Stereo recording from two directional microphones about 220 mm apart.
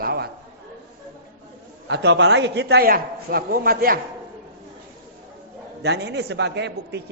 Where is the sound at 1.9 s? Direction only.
50° right (ahead or behind).